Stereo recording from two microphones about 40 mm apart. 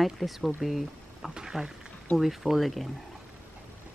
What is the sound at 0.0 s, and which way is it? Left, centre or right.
Speech, centre.